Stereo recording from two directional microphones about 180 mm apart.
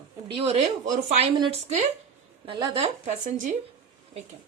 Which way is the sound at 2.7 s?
40° right (ahead or behind).